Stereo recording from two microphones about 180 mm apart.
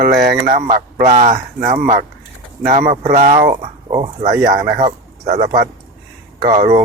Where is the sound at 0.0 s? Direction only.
60° right (ahead or behind).